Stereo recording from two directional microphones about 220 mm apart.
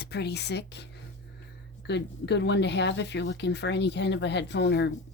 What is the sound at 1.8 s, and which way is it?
Speech, 50° left (ahead or behind).